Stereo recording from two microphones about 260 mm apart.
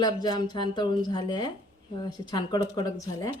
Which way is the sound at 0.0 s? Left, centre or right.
Centre.